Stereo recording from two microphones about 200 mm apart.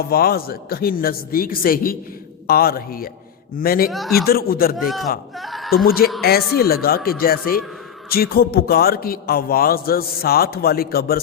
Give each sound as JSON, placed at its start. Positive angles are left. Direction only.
{"t": 0.0, "sound": "a man's voice", "side_deg": 50}
{"t": 3.8, "sound": "speech", "side_deg": 0}
{"t": 4.3, "sound": "a man's voice", "side_deg": 50}
{"t": 4.8, "sound": "speech", "side_deg": 0}
{"t": 5.4, "sound": "a sound", "side_deg": 0}
{"t": 5.7, "sound": "a man's voice", "side_deg": 50}